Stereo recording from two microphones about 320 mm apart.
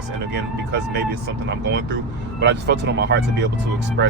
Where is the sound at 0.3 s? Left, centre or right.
Right.